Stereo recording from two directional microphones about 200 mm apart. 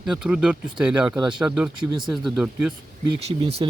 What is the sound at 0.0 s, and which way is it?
Speech, 5° right (ahead or behind).